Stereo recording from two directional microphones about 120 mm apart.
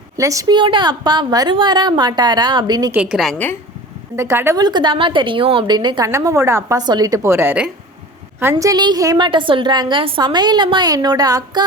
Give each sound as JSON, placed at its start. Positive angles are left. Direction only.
{"t": 0.2, "sound": "a woman's voice", "side_deg": -25}
{"t": 2.9, "sound": "a woman's voice", "side_deg": -10}
{"t": 3.3, "sound": "speech", "side_deg": 15}
{"t": 4.1, "sound": "a woman's voice", "side_deg": -20}
{"t": 4.5, "sound": "a woman's voice", "side_deg": -35}
{"t": 6.1, "sound": "a woman's voice", "side_deg": -25}
{"t": 9.1, "sound": "a woman's voice", "side_deg": -40}